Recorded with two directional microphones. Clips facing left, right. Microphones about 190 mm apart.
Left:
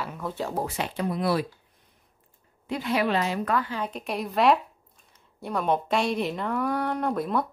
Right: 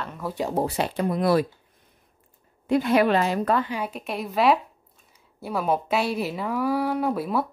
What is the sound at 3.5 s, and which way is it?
Speech, 20° right (ahead or behind).